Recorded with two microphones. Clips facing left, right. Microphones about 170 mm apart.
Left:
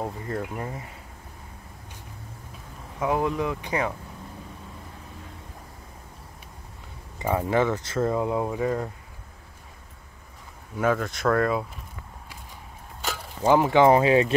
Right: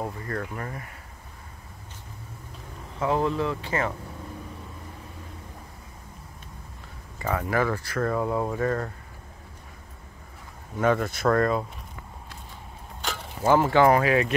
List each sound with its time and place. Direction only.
0.0 s speech: 15° left (ahead or behind)
3.0 s speech: 10° left (ahead or behind)
7.2 s speech: 20° left (ahead or behind)
10.8 s speech: centre (ahead or behind)
13.4 s speech: 15° left (ahead or behind)